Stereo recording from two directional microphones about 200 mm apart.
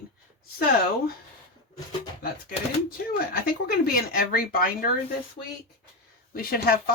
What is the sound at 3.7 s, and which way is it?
Speech, 50° left (ahead or behind).